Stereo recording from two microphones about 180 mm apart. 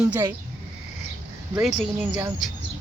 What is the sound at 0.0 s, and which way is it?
Speech, 10° right (ahead or behind).